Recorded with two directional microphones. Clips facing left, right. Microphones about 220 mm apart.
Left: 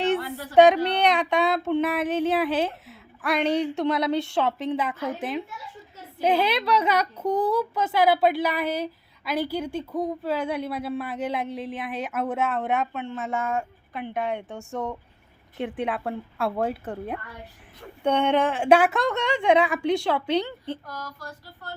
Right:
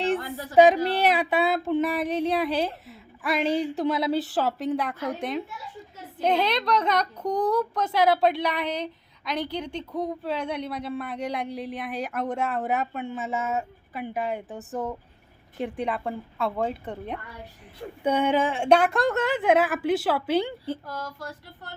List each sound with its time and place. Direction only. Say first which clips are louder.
0.5 s a woman's voice: left 1 dB; centre (ahead or behind)
18.0 s a woman's voice: left 1 dB; 5° right (ahead or behind)
20.8 s a sound: right 3 dB; 25° right (ahead or behind)